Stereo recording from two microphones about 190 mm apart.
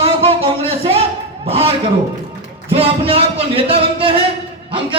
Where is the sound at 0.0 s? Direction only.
30° right (ahead or behind).